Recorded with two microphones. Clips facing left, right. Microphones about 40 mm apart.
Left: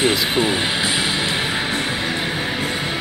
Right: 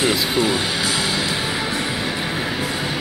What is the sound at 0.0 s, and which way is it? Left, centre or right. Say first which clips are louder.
Speech: left 1 dB; left.